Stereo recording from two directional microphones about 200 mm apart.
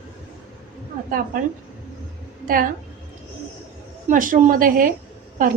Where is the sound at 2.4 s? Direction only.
45° right (ahead or behind).